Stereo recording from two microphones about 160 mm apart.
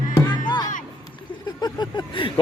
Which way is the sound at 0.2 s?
25° left (ahead or behind).